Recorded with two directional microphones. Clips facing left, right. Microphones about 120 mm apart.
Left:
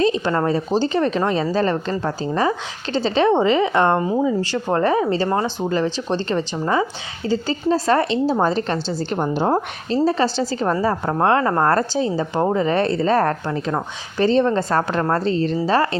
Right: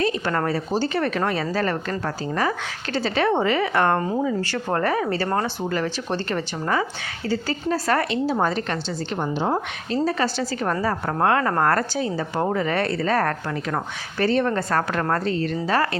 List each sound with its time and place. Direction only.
0.0 s speech: 20° left (ahead or behind)
4.0 s a woman's voice: 10° left (ahead or behind); by 9.6 s 45° left (ahead or behind)
9.9 s speech: 30° left (ahead or behind)